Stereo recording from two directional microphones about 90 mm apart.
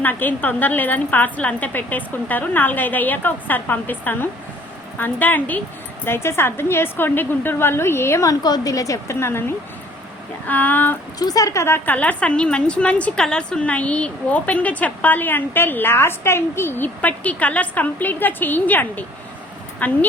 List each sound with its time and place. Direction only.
0.0 s a woman's voice: 20° left (ahead or behind)
10.4 s a woman's voice: 20° left (ahead or behind)
11.2 s a woman's voice: 45° left (ahead or behind)
11.6 s a woman's voice: 25° left (ahead or behind)
11.9 s a woman's voice: 15° left (ahead or behind)